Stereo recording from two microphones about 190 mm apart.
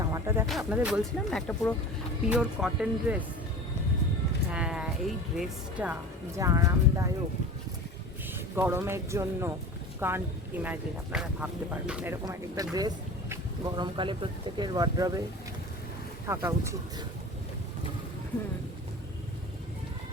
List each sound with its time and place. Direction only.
0.0 s music: 15° right (ahead or behind)
0.4 s speech: 5° right (ahead or behind)
4.5 s speech: 5° right (ahead or behind)
8.3 s speech: 10° right (ahead or behind)
16.2 s speech: 15° right (ahead or behind)